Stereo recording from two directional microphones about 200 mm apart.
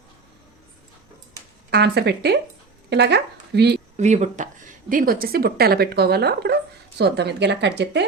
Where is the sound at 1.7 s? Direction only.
55° right (ahead or behind).